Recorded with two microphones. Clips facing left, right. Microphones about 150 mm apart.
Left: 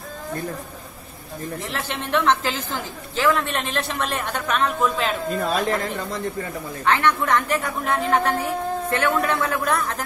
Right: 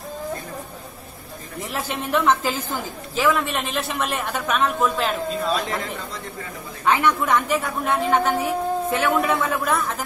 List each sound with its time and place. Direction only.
1.7 s a woman's voice: 10° right (ahead or behind)
5.3 s a woman's voice: 50° left (ahead or behind)
6.8 s a woman's voice: 10° right (ahead or behind)